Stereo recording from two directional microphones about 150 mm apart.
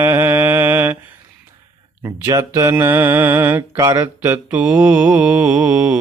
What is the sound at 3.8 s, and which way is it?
Speech, 25° right (ahead or behind).